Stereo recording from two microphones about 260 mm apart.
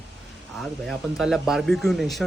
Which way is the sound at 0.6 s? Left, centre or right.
Centre.